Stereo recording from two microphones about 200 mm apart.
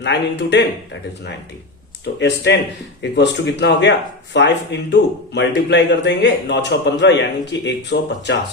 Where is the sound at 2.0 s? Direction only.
55° left (ahead or behind).